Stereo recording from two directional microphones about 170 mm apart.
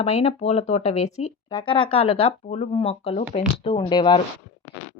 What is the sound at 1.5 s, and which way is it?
A woman's voice, 30° left (ahead or behind).